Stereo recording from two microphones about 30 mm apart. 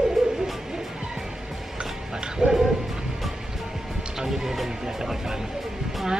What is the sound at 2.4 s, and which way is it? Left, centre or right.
Bow-wow, right.